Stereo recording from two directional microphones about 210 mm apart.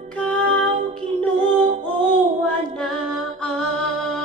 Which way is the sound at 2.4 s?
Centre (ahead or behind).